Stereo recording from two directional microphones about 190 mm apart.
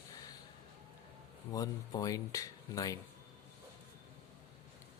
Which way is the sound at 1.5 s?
20° left (ahead or behind).